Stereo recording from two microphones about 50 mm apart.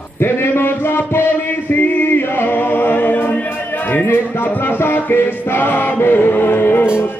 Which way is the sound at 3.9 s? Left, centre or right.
Left.